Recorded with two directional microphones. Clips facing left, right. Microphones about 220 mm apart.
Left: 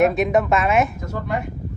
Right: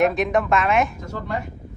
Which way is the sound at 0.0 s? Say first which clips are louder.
Left 2 dB; 5° left (ahead or behind).